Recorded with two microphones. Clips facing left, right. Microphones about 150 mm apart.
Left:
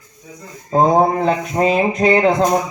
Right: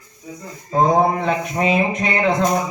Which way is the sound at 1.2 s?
35° left (ahead or behind).